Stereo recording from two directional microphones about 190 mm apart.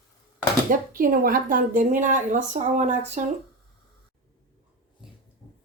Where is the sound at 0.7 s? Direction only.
50° right (ahead or behind).